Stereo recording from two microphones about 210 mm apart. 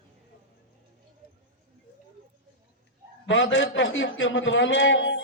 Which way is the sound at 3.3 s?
60° left (ahead or behind).